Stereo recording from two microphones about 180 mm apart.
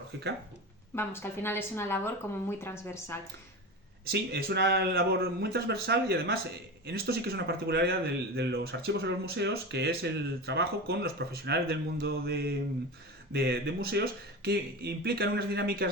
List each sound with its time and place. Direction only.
0.9 s a woman's voice: 15° left (ahead or behind)
4.1 s speech: 60° right (ahead or behind)